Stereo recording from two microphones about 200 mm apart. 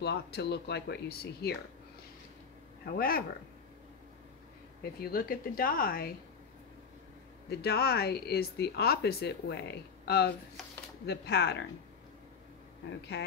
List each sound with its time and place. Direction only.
0.0 s speech: 55° left (ahead or behind)
2.8 s speech: 45° left (ahead or behind)
5.0 s speech: 45° left (ahead or behind)
7.4 s speech: 50° left (ahead or behind)